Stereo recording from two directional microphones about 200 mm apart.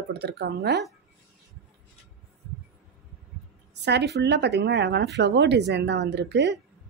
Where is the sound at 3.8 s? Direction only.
55° right (ahead or behind).